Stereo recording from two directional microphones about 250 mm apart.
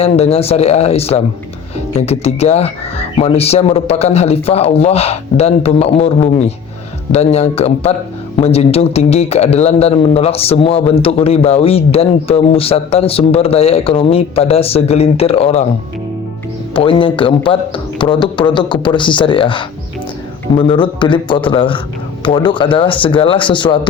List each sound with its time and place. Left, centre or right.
0.0 s a man's voice: left
16.7 s a man's voice: centre